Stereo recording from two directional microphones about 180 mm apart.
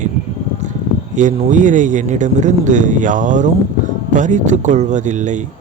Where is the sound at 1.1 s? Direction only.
45° right (ahead or behind).